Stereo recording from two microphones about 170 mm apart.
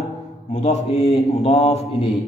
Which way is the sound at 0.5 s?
45° left (ahead or behind).